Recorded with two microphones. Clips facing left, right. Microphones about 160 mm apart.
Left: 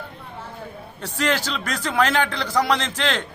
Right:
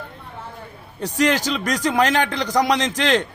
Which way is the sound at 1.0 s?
15° right (ahead or behind).